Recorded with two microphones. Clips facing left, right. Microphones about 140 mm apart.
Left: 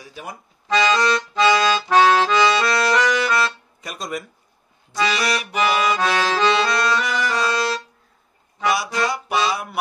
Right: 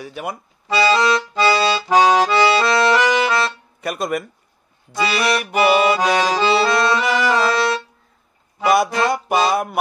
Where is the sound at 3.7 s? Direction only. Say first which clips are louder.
Right 10 dB; 60° right (ahead or behind).